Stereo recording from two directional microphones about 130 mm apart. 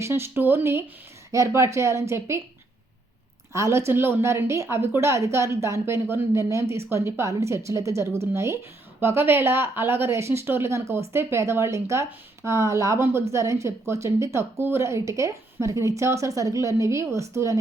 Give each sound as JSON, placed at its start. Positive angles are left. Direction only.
{"t": 0.0, "sound": "speech", "side_deg": -20}
{"t": 3.5, "sound": "speech", "side_deg": -20}